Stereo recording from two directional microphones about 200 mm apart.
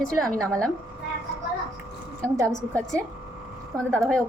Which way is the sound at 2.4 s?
5° left (ahead or behind).